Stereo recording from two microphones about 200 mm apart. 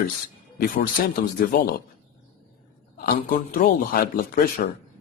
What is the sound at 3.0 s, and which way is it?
A man's voice, 45° left (ahead or behind).